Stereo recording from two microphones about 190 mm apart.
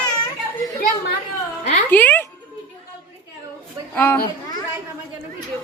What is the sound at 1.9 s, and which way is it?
Music, 10° left (ahead or behind).